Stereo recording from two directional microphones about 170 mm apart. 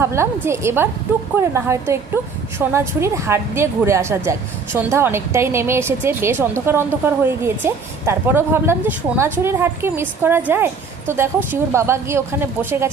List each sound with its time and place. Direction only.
0.4 s a woman's voice: 15° right (ahead or behind)